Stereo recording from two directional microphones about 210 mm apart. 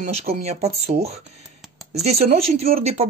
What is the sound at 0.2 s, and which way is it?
Speech, 30° right (ahead or behind).